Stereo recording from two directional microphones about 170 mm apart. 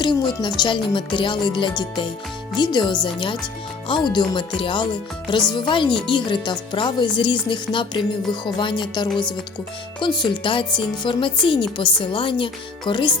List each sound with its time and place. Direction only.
0.0 s speech: 25° left (ahead or behind)